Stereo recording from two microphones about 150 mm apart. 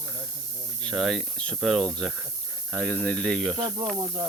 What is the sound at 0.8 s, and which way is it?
Speech, 5° left (ahead or behind).